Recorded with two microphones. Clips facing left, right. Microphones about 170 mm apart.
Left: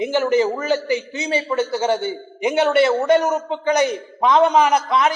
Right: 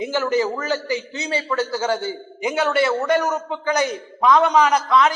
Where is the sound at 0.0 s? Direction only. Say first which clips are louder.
Left 3 dB; 20° left (ahead or behind).